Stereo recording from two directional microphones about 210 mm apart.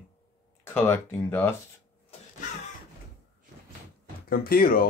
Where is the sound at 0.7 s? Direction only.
10° left (ahead or behind).